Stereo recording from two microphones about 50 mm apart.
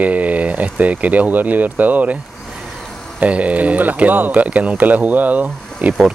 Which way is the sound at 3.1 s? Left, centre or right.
Right.